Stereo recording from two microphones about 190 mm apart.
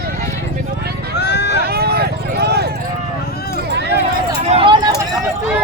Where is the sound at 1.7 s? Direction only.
55° right (ahead or behind).